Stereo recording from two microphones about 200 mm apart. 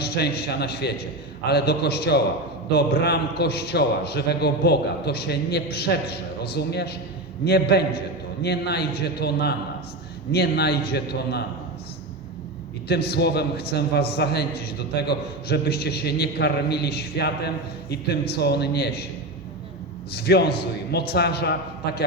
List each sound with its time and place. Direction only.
0.0 s a man's voice: 55° left (ahead or behind)
12.9 s a man's voice: 55° left (ahead or behind)
20.1 s a man's voice: 55° left (ahead or behind)